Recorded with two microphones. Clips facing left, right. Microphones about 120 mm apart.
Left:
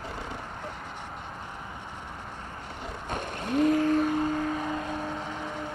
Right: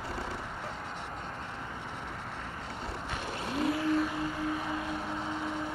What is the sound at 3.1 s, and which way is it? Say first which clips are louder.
Vehicle: left 7 dB; 50° left (ahead or behind).